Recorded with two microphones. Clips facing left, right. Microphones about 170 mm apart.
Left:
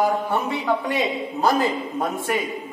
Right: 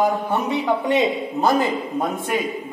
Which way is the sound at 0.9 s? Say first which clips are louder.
Right 4 dB; 20° right (ahead or behind).